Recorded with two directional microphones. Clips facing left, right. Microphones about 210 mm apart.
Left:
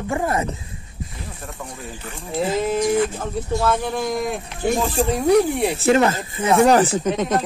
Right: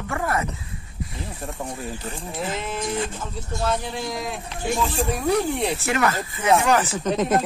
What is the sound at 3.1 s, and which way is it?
A man's voice, 55° left (ahead or behind).